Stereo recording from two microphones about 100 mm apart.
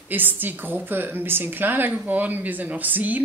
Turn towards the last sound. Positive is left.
turn(degrees=-15)  # may be behind; listen again after turning